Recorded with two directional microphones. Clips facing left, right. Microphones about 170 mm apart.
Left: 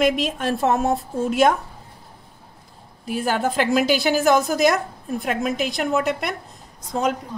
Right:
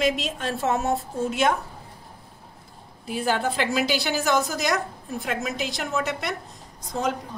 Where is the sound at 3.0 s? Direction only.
50° left (ahead or behind).